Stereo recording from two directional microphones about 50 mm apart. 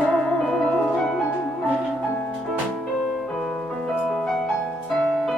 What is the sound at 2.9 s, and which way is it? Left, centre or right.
Music, centre.